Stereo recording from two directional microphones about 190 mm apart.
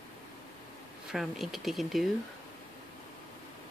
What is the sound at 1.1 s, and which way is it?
Speech, centre (ahead or behind).